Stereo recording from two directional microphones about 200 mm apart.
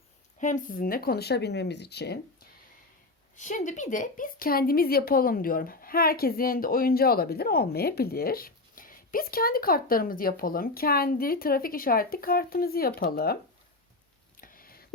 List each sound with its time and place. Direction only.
0.3 s a woman's voice: 40° left (ahead or behind); by 2.5 s 55° left (ahead or behind)
3.3 s a woman's voice: 40° left (ahead or behind)
14.3 s a sound: 45° left (ahead or behind)